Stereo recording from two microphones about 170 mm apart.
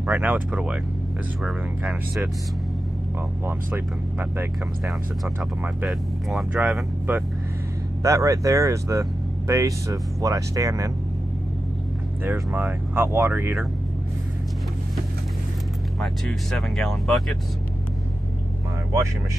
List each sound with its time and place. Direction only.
0.0 s speech: 10° right (ahead or behind)
3.4 s speech: 15° right (ahead or behind)
5.9 s speech: centre (ahead or behind)
8.0 s speech: 20° right (ahead or behind)
12.3 s speech: 10° right (ahead or behind)
16.0 s speech: centre (ahead or behind)